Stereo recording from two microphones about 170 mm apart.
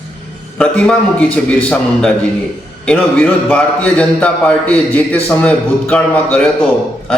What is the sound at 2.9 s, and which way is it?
A man's voice, 10° left (ahead or behind).